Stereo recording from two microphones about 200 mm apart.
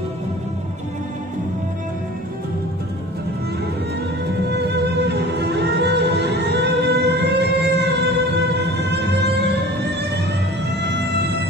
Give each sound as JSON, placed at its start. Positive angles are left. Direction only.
{"t": 4.5, "sound": "music", "side_deg": -55}